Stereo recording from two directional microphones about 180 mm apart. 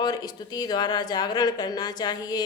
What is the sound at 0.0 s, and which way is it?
Speech, 20° left (ahead or behind).